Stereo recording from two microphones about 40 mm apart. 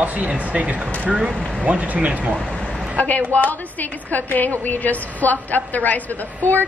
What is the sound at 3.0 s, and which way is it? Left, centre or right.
A woman's voice, left.